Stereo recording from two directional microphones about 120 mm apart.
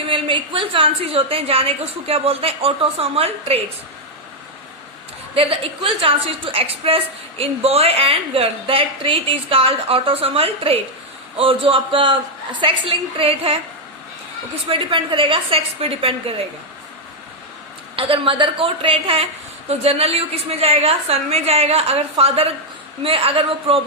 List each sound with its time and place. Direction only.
0.1 s a woman's voice: 45° right (ahead or behind)
5.3 s a woman's voice: 50° right (ahead or behind)
14.7 s a woman's voice: 45° right (ahead or behind)
17.9 s a woman's voice: 50° right (ahead or behind)